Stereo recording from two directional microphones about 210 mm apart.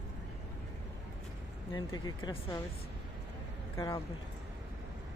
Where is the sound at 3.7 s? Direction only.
15° left (ahead or behind).